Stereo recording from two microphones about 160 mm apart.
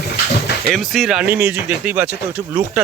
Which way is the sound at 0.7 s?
Centre (ahead or behind).